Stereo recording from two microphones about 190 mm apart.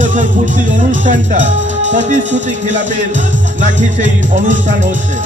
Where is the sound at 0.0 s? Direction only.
40° right (ahead or behind).